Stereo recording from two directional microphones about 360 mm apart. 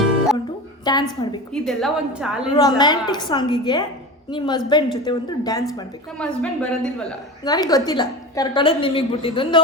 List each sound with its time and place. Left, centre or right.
0.9 s a woman's voice: centre
1.6 s a woman's voice: centre
2.6 s a woman's voice: centre